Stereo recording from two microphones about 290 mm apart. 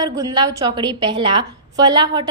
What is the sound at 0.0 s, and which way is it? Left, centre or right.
A woman's voice, centre.